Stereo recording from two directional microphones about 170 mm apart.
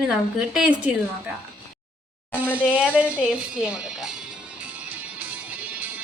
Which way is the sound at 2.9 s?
10° right (ahead or behind).